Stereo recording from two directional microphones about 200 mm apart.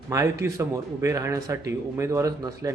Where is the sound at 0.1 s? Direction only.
15° right (ahead or behind).